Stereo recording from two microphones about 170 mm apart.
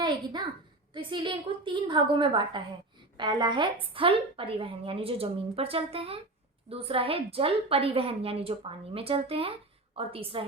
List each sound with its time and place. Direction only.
0.9 s a woman's voice: 30° right (ahead or behind)